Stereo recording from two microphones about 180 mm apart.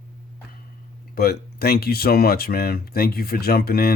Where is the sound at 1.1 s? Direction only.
55° left (ahead or behind).